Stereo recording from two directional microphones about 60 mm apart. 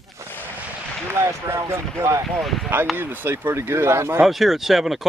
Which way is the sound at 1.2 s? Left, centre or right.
Right.